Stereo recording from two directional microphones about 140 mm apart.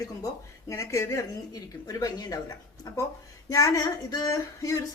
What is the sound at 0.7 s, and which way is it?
Speech, 20° left (ahead or behind).